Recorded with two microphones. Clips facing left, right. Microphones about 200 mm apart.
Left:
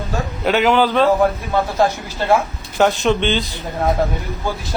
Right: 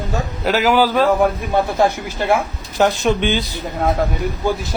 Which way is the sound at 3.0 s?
10° right (ahead or behind).